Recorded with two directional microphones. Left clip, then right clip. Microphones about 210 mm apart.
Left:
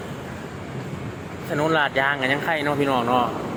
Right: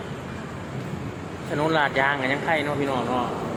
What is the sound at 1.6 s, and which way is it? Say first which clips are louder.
Speech: left 1 dB; 5° left (ahead or behind).